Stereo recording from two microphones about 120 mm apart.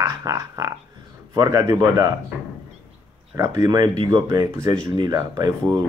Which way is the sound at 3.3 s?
30° right (ahead or behind).